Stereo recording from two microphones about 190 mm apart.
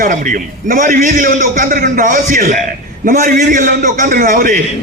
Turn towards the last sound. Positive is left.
turn(degrees=-45)  # may be behind; listen again after turning